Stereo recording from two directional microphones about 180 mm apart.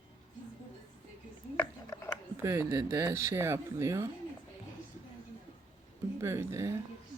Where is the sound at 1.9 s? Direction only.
20° left (ahead or behind).